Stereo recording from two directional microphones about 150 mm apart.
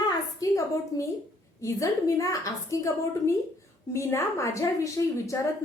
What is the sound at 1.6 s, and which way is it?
A woman's voice, 20° left (ahead or behind).